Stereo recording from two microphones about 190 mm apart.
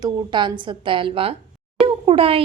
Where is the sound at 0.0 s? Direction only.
25° right (ahead or behind).